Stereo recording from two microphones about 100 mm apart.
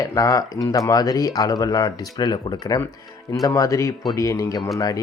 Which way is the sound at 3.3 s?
35° left (ahead or behind).